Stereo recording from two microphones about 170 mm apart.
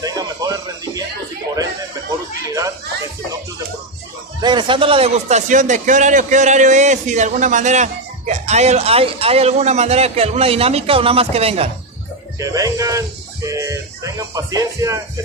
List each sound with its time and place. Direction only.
0.0 s a sound: 20° right (ahead or behind)
4.4 s speech: 25° right (ahead or behind)
12.4 s speech: 20° right (ahead or behind)
13.5 s music: 20° right (ahead or behind)